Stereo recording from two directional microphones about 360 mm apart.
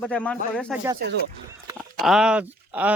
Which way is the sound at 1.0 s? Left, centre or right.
Right.